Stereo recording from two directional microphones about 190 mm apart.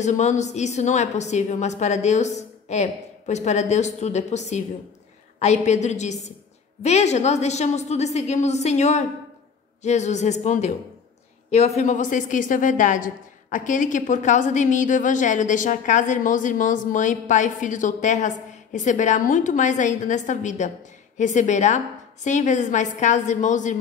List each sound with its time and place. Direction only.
0.0 s a woman's voice: 40° left (ahead or behind)